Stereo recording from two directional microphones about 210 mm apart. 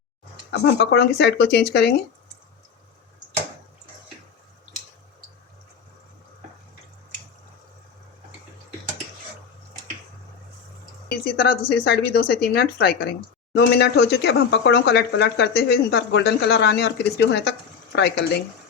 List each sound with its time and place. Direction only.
0.5 s speech: 55° left (ahead or behind)
11.3 s speech: 50° left (ahead or behind)